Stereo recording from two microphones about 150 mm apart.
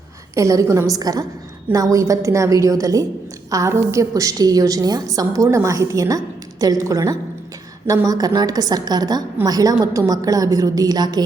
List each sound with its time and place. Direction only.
0.3 s a woman's voice: 20° right (ahead or behind)